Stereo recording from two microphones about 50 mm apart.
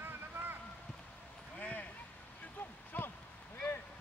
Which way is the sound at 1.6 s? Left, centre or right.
Left.